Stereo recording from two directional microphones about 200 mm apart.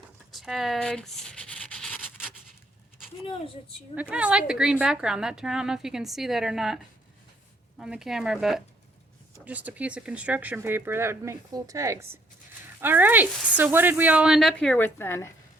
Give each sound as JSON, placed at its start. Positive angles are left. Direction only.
{"t": 0.3, "sound": "a sound", "side_deg": 0}
{"t": 3.2, "sound": "a woman's voice", "side_deg": 25}
{"t": 4.1, "sound": "a woman's voice", "side_deg": -5}
{"t": 7.8, "sound": "a woman's voice", "side_deg": -5}